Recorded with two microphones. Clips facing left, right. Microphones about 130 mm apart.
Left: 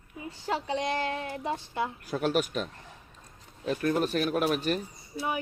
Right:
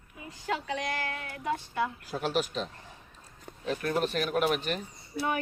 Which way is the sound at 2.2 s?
50° left (ahead or behind).